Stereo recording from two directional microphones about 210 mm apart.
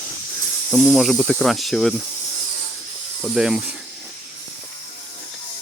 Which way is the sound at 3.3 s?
5° right (ahead or behind).